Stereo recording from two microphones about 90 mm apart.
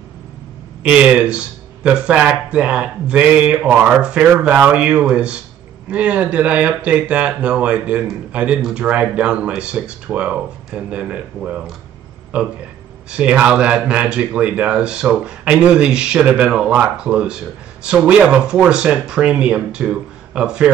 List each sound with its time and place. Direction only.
0.8 s a man's voice: 10° right (ahead or behind)